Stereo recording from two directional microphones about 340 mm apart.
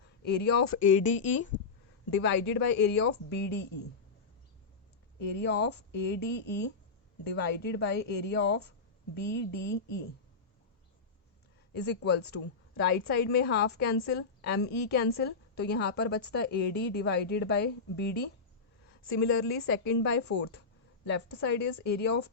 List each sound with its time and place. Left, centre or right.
0.2 s a woman's voice: left
5.3 s a woman's voice: left
11.7 s a woman's voice: left